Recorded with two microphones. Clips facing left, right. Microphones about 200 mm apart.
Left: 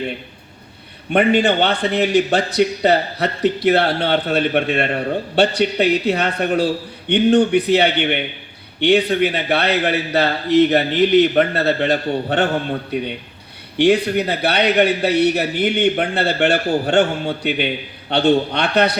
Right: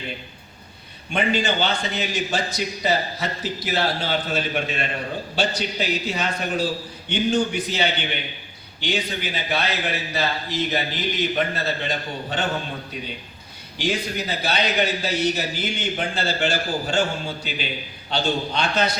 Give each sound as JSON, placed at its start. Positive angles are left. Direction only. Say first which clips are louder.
{"t": 1.1, "sound": "a man's voice", "louder": "left 8 dB", "side_deg": 65}